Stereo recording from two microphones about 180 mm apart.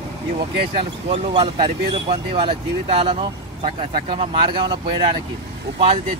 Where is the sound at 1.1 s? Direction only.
30° right (ahead or behind).